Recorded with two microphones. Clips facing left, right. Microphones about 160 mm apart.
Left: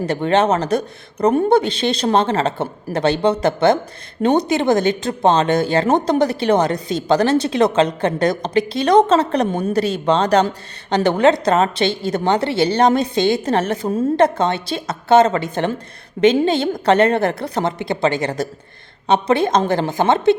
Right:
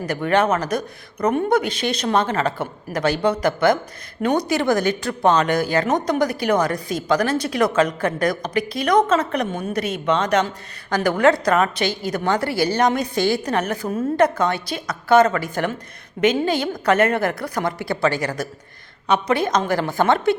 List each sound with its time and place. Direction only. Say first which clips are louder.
0.0 s speech: left 3 dB; 30° left (ahead or behind)